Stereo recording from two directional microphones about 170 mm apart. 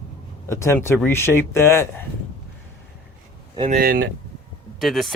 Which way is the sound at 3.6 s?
55° right (ahead or behind).